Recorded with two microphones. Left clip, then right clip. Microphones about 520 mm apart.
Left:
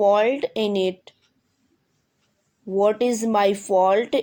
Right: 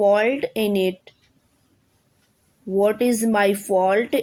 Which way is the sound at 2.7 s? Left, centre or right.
Right.